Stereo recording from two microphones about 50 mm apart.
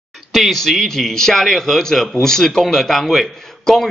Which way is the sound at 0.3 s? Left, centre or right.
Centre.